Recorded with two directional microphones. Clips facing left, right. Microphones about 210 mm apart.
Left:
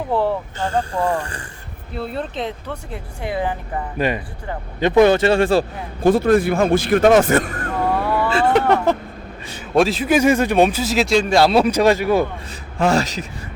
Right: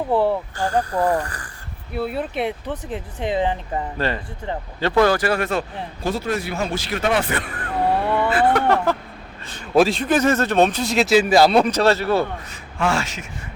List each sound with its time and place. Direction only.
0.1 s a sound: 15° right (ahead or behind)
0.6 s speech: 25° left (ahead or behind)
2.0 s speech: 5° right (ahead or behind)
3.9 s a man's voice: 15° left (ahead or behind); by 5.6 s 30° left (ahead or behind)
6.0 s speech: 50° left (ahead or behind)
8.3 s speech: 25° left (ahead or behind)
9.6 s a man's voice: centre (ahead or behind)
12.8 s speech: 40° left (ahead or behind)